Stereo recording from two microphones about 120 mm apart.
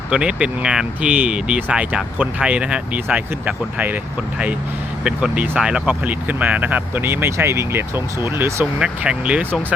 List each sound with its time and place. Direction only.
0.1 s speech: 10° right (ahead or behind)
5.0 s speech: 10° right (ahead or behind)
8.8 s speech: 10° right (ahead or behind)